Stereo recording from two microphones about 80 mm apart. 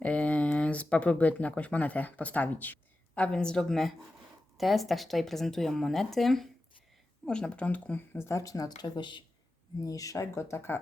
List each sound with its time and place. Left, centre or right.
0.0 s speech: centre
3.2 s speech: centre; by 9.2 s left
9.8 s speech: left